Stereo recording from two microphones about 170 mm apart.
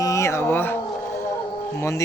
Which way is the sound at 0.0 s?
20° left (ahead or behind).